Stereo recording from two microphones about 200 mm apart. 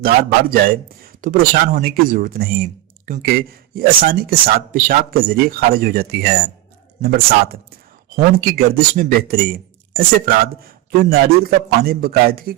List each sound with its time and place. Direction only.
0.0 s speech: 50° right (ahead or behind)